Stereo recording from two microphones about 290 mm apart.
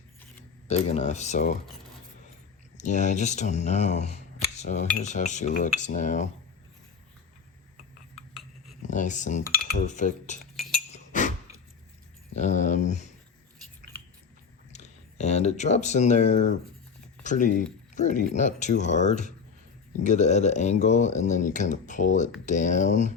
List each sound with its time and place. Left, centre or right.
0.7 s speech: left
2.7 s speech: left
8.8 s speech: left
10.9 s chink: left
12.3 s speech: left
14.7 s speech: left